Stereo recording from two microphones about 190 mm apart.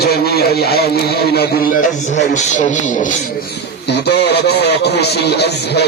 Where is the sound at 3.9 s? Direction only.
60° left (ahead or behind).